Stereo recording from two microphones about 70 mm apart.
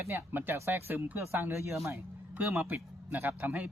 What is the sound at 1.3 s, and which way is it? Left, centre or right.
Speech, right.